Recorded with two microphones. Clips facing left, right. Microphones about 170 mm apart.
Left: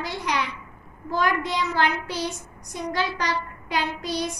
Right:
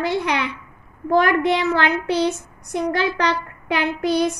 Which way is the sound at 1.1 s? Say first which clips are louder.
Right 8 dB; 65° right (ahead or behind).